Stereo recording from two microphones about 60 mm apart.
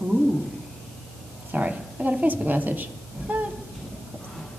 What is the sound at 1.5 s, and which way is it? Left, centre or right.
A woman's voice, right.